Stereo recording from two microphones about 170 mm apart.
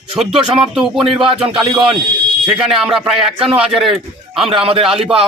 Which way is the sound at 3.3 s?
30° right (ahead or behind).